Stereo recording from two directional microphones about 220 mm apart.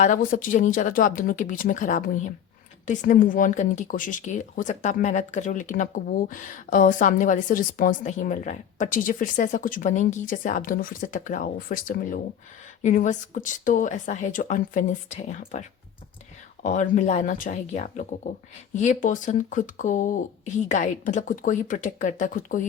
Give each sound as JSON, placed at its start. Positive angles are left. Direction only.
{"t": 0.0, "sound": "speech", "side_deg": 35}
{"t": 16.6, "sound": "speech", "side_deg": 35}